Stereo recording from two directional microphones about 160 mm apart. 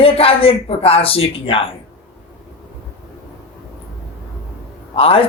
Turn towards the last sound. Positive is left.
turn(degrees=35)  # may be behind; listen again after turning